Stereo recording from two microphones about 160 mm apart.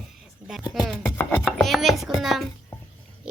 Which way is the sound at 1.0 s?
10° left (ahead or behind).